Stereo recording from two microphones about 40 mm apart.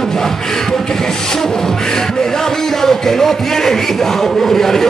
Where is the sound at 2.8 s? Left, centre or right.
Centre.